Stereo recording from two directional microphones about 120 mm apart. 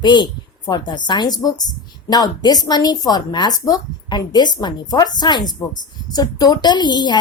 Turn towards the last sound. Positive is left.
turn(degrees=35)  # may be behind; listen again after turning